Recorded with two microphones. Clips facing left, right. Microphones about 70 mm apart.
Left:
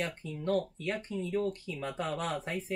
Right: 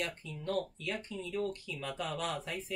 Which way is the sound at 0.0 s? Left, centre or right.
Left.